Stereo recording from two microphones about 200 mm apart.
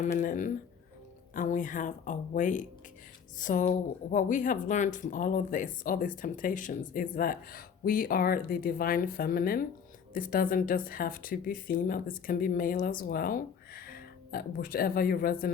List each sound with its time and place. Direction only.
0.0 s speech: 40° left (ahead or behind)